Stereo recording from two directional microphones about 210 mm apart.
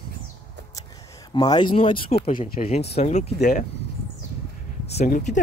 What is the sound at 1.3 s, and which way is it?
Speech, 20° left (ahead or behind).